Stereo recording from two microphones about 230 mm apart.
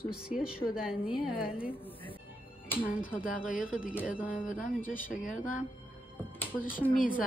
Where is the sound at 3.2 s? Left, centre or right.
Left.